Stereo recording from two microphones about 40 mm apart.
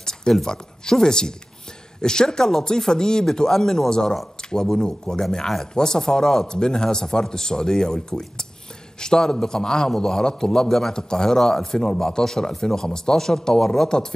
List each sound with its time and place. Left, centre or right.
0.3 s a man's voice: centre